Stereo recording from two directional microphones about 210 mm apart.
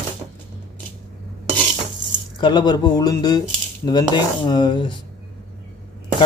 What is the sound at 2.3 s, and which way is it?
Speech, 20° left (ahead or behind).